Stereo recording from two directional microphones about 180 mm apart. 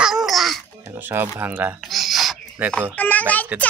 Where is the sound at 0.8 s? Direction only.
10° right (ahead or behind).